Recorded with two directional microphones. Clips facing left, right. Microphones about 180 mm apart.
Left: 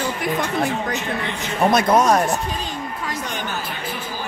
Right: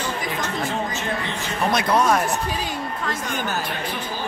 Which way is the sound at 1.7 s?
40° left (ahead or behind).